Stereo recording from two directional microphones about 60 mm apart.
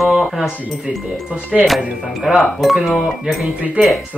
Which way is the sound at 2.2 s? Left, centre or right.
Centre.